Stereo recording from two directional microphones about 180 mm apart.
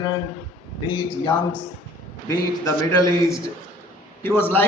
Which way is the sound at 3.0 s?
15° left (ahead or behind).